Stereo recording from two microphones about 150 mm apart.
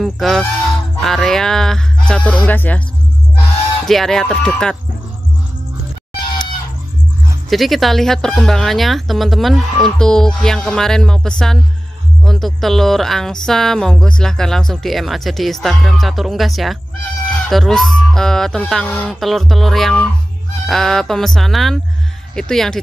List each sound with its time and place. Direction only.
0.0 s speech: centre (ahead or behind)
2.4 s music: 10° left (ahead or behind)
3.8 s speech: 5° left (ahead or behind)
6.2 s chicken: 30° left (ahead or behind)
7.4 s speech: centre (ahead or behind)